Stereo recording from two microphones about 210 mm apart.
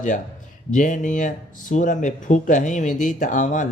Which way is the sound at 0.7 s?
35° left (ahead or behind).